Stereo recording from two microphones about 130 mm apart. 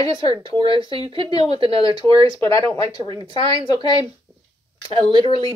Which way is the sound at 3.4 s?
45° right (ahead or behind).